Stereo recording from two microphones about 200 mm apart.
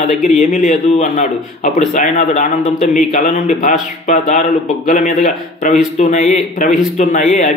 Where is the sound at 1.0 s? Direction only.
40° left (ahead or behind).